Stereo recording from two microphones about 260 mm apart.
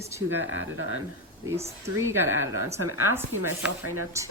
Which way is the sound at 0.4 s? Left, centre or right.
Right.